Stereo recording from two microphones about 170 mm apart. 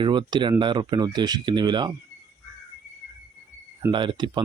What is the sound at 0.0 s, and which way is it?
Speech, 25° right (ahead or behind).